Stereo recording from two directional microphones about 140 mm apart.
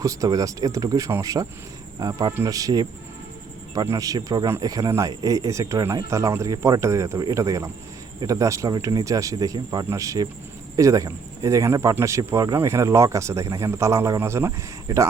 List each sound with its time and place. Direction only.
0.0 s speech: 25° right (ahead or behind)
3.8 s speech: 25° right (ahead or behind)